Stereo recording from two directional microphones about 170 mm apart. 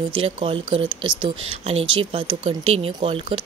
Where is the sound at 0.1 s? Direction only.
30° right (ahead or behind).